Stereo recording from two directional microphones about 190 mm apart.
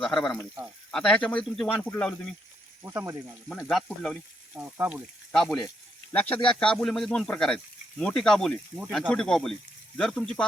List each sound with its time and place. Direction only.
0.0 s a man's voice: 10° left (ahead or behind)
2.8 s speech: 15° right (ahead or behind)
3.5 s speech: centre (ahead or behind)
4.5 s speech: 10° right (ahead or behind)